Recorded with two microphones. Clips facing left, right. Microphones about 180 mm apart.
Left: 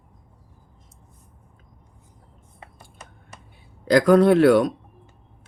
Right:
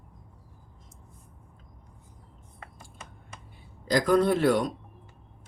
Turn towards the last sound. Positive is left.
turn(degrees=70)  # may be behind; listen again after turning